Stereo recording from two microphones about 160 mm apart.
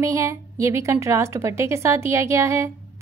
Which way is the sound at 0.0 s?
20° right (ahead or behind).